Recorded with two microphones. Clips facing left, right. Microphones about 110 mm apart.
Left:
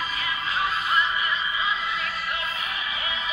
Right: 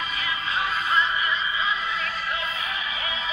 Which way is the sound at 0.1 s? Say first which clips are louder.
Even; 30° left (ahead or behind).